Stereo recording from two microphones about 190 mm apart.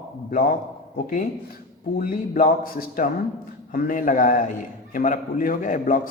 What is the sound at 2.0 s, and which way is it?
Speech, 50° left (ahead or behind).